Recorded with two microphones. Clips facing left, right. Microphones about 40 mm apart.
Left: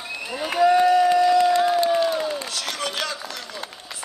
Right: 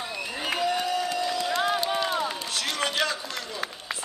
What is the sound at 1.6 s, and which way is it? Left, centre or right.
Run, right.